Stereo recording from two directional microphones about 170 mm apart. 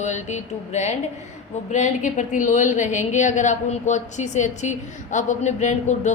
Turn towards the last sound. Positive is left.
turn(degrees=45)  # may be behind; listen again after turning